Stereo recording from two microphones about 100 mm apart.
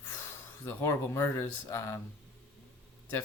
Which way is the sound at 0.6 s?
30° left (ahead or behind).